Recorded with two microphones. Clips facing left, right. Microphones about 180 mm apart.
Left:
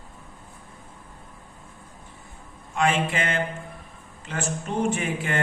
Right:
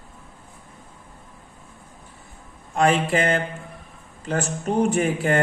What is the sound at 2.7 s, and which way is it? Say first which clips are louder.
Speech: right 4 dB; 40° right (ahead or behind).